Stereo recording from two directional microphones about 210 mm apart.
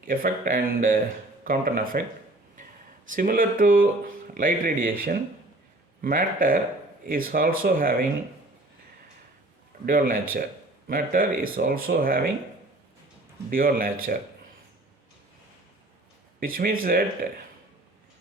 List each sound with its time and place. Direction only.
0.0 s speech: 40° right (ahead or behind)
3.1 s speech: 40° right (ahead or behind)
9.8 s speech: 40° right (ahead or behind)
13.5 s speech: 45° right (ahead or behind)
16.4 s speech: 45° right (ahead or behind)